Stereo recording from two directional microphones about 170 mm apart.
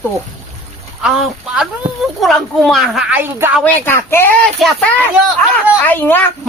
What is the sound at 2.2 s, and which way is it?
Speech, centre (ahead or behind).